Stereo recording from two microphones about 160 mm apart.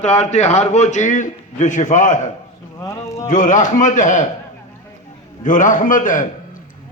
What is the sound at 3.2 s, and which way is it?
A man's voice, 50° left (ahead or behind).